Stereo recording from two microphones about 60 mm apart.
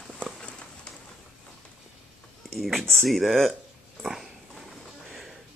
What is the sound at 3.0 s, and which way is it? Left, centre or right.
Speech, centre.